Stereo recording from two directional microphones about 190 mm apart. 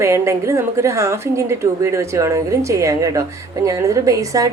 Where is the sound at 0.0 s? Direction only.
15° right (ahead or behind).